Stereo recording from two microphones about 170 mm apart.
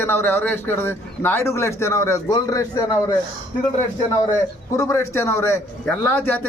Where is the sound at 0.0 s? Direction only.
15° left (ahead or behind).